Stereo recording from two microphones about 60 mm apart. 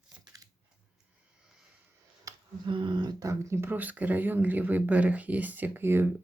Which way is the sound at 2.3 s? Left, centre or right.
Right.